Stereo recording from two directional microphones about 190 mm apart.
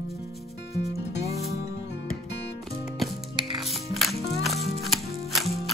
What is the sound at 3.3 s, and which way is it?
Music, 25° right (ahead or behind).